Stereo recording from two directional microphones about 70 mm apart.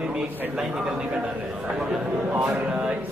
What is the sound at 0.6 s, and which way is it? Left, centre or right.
Speech, centre.